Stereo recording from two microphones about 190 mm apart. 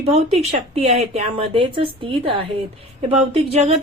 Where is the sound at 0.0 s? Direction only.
35° right (ahead or behind).